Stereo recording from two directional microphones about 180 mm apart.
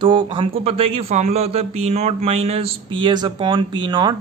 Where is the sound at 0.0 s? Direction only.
30° right (ahead or behind).